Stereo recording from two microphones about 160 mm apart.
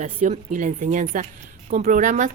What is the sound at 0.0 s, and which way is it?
Speech, 45° right (ahead or behind).